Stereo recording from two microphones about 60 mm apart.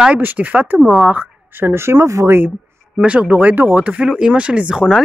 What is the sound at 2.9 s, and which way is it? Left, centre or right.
Speech, right.